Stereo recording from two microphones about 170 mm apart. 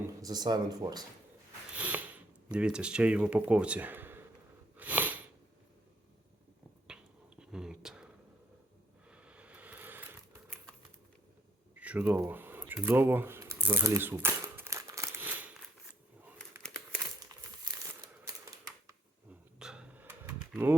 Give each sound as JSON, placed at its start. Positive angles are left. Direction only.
{"t": 0.2, "sound": "speech", "side_deg": -25}
{"t": 1.7, "sound": "a sound", "side_deg": -10}
{"t": 2.5, "sound": "speech", "side_deg": -5}
{"t": 4.8, "sound": "sniff", "side_deg": -10}
{"t": 6.8, "sound": "finger snapping", "side_deg": -5}
{"t": 9.0, "sound": "a sound", "side_deg": -5}
{"t": 11.8, "sound": "a sound", "side_deg": -10}
{"t": 16.6, "sound": "crumpling", "side_deg": 5}
{"t": 17.2, "sound": "crumpling", "side_deg": -25}
{"t": 19.3, "sound": "dog", "side_deg": -5}